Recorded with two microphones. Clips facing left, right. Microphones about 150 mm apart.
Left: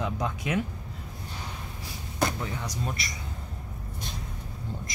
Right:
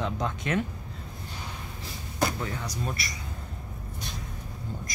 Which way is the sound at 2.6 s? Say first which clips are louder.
Even; 20° left (ahead or behind).